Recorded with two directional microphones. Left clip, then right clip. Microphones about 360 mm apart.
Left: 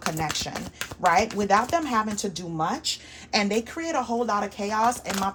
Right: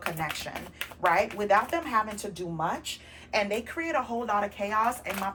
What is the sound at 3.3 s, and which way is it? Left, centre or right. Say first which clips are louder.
Speech: left 3 dB; left.